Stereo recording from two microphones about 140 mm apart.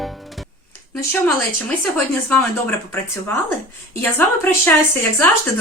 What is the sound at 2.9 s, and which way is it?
A woman's voice, 15° left (ahead or behind).